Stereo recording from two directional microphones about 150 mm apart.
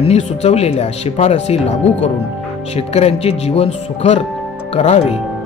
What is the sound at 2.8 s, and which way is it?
Speech, 45° left (ahead or behind).